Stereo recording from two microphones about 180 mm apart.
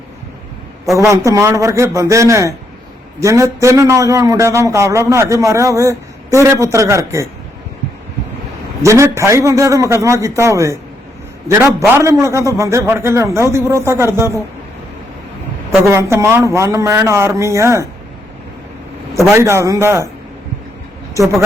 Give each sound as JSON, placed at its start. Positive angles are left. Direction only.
{"t": 0.9, "sound": "a man's voice", "side_deg": -15}
{"t": 8.8, "sound": "a man's voice", "side_deg": -15}
{"t": 11.9, "sound": "a man's voice", "side_deg": -15}
{"t": 15.9, "sound": "a man's voice", "side_deg": -15}
{"t": 19.3, "sound": "a man's voice", "side_deg": -15}